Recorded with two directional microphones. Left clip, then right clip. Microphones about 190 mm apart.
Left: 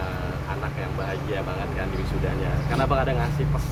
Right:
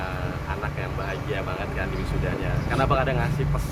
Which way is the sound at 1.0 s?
40° right (ahead or behind).